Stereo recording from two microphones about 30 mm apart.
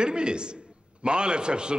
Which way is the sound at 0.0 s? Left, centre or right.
Right.